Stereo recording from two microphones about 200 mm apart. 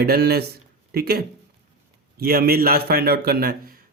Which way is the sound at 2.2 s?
50° right (ahead or behind).